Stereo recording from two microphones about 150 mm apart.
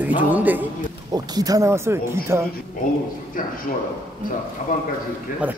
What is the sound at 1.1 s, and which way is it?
Speech, 25° right (ahead or behind).